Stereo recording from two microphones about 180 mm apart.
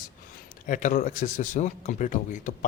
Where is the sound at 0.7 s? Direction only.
45° left (ahead or behind).